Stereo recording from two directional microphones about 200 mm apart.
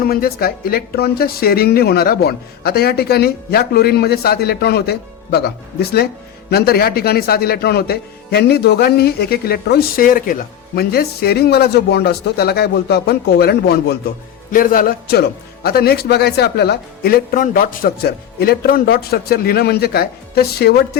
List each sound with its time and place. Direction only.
0.0 s speech: 50° left (ahead or behind)